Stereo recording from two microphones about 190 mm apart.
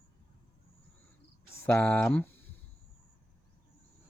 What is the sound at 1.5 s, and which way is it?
Speech, 10° left (ahead or behind).